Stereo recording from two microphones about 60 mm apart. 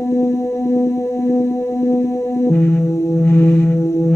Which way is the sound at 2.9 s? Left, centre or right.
Left.